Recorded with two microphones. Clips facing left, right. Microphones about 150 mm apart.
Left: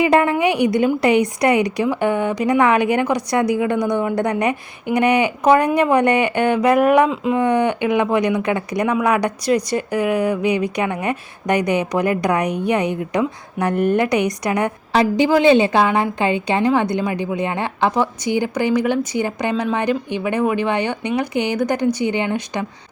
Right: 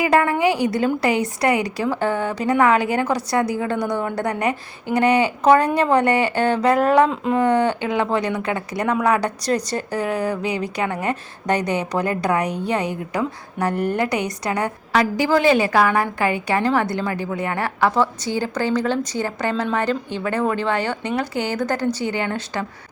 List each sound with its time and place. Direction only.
0.0 s a woman's voice: 25° left (ahead or behind)